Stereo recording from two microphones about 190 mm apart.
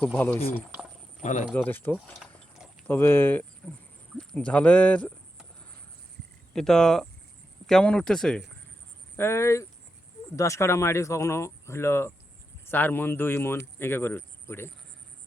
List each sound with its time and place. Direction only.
0.0 s speech: 10° left (ahead or behind)
1.2 s speech: 40° left (ahead or behind)
1.5 s speech: 10° left (ahead or behind)
6.5 s speech: 5° left (ahead or behind)
9.1 s speech: 15° left (ahead or behind)